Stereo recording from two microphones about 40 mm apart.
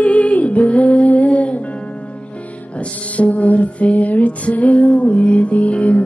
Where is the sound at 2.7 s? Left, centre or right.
Left.